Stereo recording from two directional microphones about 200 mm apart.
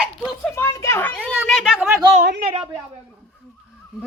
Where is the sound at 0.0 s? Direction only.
Centre (ahead or behind).